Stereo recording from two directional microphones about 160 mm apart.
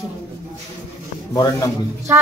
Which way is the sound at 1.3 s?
25° left (ahead or behind).